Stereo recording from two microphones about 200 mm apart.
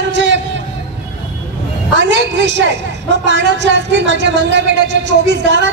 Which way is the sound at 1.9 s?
65° right (ahead or behind).